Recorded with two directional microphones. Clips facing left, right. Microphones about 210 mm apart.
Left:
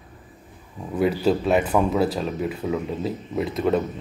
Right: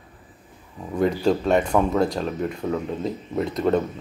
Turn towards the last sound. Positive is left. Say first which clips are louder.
# right 1 dB
turn(degrees=0)  # may be behind; listen again after turning